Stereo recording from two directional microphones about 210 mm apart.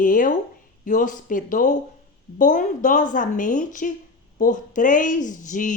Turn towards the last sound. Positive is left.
turn(degrees=40)  # may be behind; listen again after turning